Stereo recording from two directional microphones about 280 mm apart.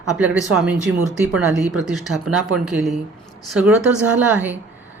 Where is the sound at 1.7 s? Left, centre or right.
Centre.